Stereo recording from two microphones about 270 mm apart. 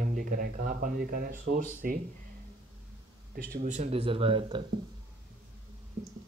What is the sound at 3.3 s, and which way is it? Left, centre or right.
Speech, right.